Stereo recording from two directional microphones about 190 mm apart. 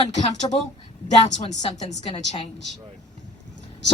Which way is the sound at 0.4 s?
25° left (ahead or behind).